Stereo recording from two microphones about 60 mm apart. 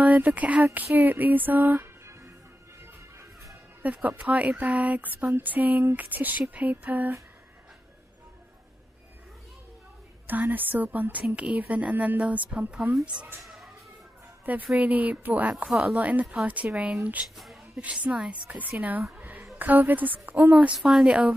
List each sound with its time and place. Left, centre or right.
0.0 s speech: right
0.7 s a sound: right
3.8 s a woman's voice: right
10.2 s a woman's voice: right
13.4 s a sound: centre
14.4 s a woman's voice: right
19.6 s a woman's voice: right
21.0 s a woman's voice: centre